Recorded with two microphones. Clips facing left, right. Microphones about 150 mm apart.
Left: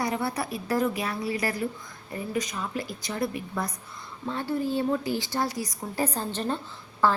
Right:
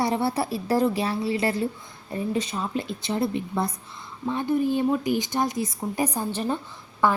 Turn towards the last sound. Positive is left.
turn(degrees=-15)  # may be behind; listen again after turning